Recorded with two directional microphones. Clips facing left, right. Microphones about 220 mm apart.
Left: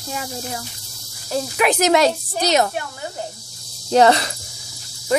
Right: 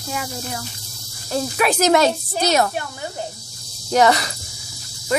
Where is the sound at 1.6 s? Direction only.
20° left (ahead or behind).